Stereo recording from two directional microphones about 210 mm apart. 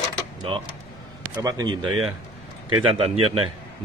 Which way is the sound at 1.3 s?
15° right (ahead or behind).